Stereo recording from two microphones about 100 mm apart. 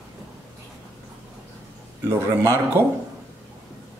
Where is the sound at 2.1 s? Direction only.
25° right (ahead or behind).